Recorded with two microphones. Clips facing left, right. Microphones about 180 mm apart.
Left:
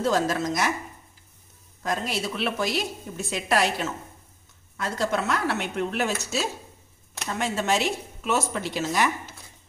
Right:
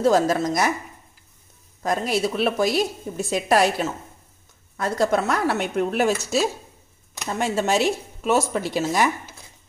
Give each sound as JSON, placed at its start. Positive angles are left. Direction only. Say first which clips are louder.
{"t": 0.0, "sound": "a woman's voice", "louder": "right 5 dB", "side_deg": -35}
{"t": 1.8, "sound": "a woman's voice", "louder": "right 6 dB", "side_deg": -40}
{"t": 4.8, "sound": "a woman's voice", "louder": "right 5 dB", "side_deg": -40}